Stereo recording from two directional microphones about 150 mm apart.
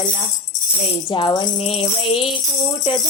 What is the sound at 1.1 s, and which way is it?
Speech, 30° left (ahead or behind).